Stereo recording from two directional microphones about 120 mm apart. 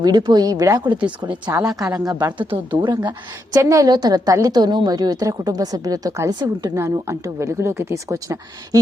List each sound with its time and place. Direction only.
0.0 s speech: 35° right (ahead or behind)
0.9 s speech: 10° right (ahead or behind)
1.6 s speech: 30° right (ahead or behind)
3.5 s a woman's voice: 25° right (ahead or behind)